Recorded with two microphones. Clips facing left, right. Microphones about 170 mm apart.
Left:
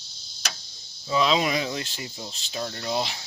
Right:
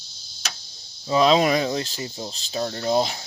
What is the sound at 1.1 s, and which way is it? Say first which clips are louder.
Speech: right 5 dB; 40° right (ahead or behind).